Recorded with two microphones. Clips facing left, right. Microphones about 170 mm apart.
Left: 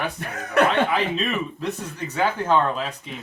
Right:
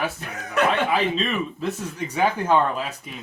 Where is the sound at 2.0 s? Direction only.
10° right (ahead or behind).